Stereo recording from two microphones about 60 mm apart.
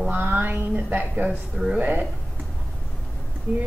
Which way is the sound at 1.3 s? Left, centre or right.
Centre.